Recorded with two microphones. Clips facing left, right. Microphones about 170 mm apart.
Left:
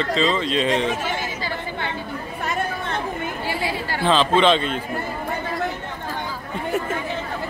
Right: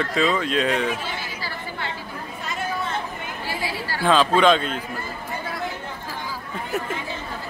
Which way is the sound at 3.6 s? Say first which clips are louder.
Left 1 dB; 20° left (ahead or behind).